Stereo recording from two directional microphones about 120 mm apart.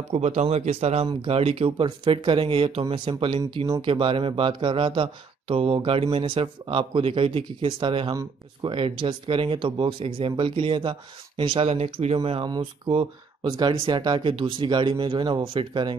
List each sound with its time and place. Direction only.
0.1 s speech: 65° right (ahead or behind)
12.2 s speech: 45° right (ahead or behind)